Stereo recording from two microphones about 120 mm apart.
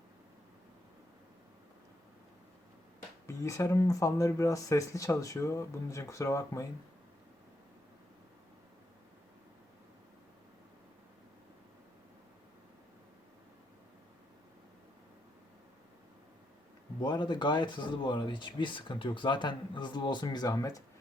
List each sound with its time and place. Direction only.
3.2 s speech: 25° left (ahead or behind)
17.0 s speech: 40° left (ahead or behind)